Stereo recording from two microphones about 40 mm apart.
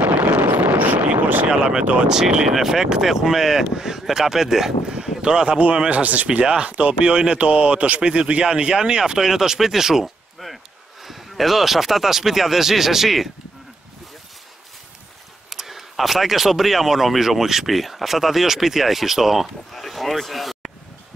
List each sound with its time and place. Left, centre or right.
0.6 s vehicle: right
1.5 s speech: centre
5.2 s speech: right
5.9 s speech: right
6.2 s speech: right
6.7 s speech: right; by 10.1 s centre
10.4 s a sound: centre
11.1 s speech: centre
15.5 s speech: centre
19.7 s speech: centre